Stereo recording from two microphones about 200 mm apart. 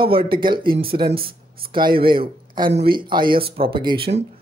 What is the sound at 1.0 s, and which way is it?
Speech, 50° right (ahead or behind).